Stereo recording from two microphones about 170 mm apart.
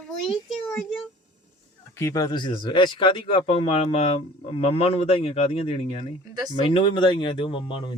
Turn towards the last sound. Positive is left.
turn(degrees=30)  # may be behind; listen again after turning